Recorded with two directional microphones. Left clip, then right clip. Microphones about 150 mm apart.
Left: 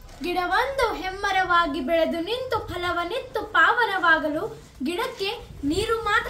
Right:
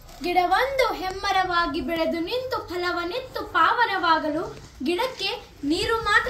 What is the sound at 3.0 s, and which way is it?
A woman's voice, 35° left (ahead or behind).